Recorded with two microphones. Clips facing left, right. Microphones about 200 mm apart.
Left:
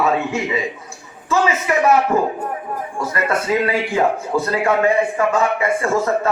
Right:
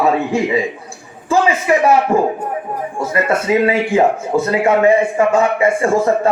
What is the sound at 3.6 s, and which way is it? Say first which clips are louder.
A man's voice: right 5 dB; 25° right (ahead or behind).